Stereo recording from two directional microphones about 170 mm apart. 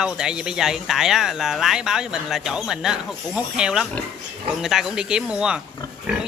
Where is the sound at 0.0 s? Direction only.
5° right (ahead or behind).